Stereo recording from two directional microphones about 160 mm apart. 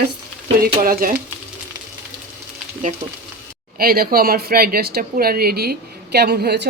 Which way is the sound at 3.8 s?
70° right (ahead or behind).